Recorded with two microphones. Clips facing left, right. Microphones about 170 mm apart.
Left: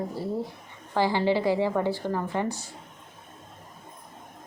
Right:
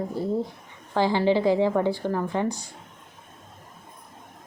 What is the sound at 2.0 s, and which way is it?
Speech, centre (ahead or behind).